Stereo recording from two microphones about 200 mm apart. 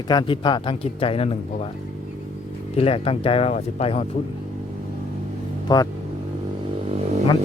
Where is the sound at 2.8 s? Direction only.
30° left (ahead or behind).